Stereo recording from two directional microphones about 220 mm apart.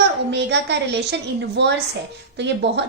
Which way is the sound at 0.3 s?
50° right (ahead or behind).